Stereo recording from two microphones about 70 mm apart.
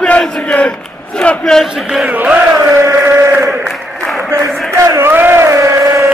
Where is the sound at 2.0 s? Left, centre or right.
Right.